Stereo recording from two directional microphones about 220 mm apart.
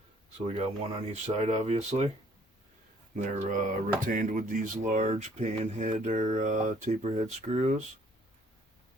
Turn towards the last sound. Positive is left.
turn(degrees=-30)  # may be behind; listen again after turning